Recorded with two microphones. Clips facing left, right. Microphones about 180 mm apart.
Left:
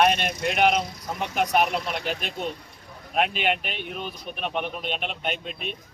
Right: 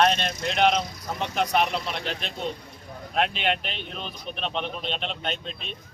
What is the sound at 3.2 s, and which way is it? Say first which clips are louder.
Speech: left 1 dB; 5° left (ahead or behind).